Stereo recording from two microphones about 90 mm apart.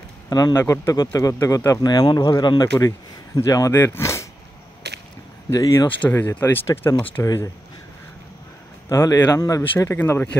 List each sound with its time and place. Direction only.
0.3 s speech: 45° left (ahead or behind)
0.6 s a man's voice: 30° left (ahead or behind)
1.1 s a man's voice: 40° left (ahead or behind)
1.9 s speech: 50° left (ahead or behind)
3.3 s a man's voice: 40° left (ahead or behind)
5.5 s a man's voice: 40° left (ahead or behind)
6.1 s speech: 25° left (ahead or behind)
8.8 s a man's voice: 40° left (ahead or behind)